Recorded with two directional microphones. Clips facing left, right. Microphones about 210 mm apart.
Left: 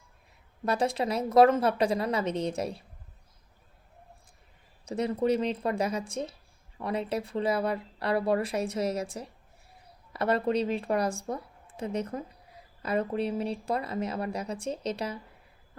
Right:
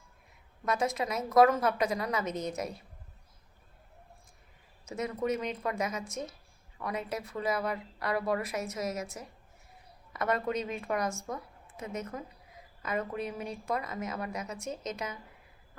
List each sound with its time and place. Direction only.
0.6 s speech: 30° left (ahead or behind)
4.9 s speech: 30° left (ahead or behind)